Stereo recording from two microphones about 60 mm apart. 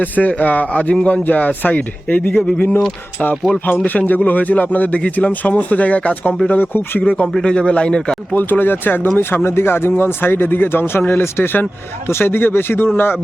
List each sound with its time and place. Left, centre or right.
0.0 s speech: left
2.2 s speech: centre
3.8 s speech: left
7.4 s speech: centre
8.3 s speech: left